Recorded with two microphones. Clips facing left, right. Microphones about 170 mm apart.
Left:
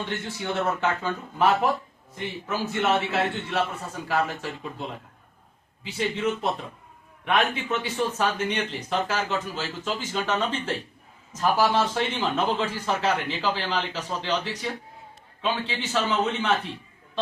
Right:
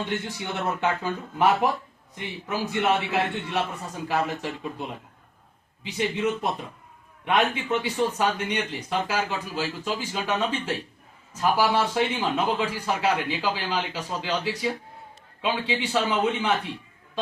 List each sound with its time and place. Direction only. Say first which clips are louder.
0.0 s speech: right 1 dB; 15° right (ahead or behind)